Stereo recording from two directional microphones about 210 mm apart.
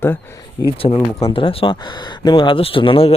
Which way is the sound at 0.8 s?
25° left (ahead or behind).